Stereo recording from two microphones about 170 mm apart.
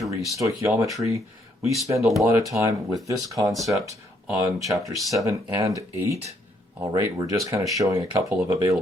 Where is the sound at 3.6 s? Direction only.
20° right (ahead or behind).